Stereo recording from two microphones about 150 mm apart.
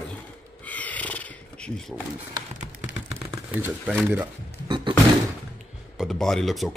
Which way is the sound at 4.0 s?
10° right (ahead or behind).